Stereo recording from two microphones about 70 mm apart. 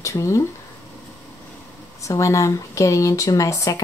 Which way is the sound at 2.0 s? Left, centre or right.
Left.